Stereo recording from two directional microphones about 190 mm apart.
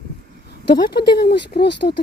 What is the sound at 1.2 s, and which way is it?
Speech, 60° left (ahead or behind).